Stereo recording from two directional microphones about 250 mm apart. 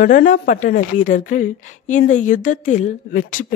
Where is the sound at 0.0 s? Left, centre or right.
Left.